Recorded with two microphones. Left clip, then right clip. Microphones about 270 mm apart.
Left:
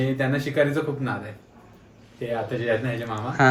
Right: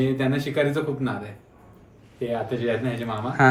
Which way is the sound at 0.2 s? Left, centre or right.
Centre.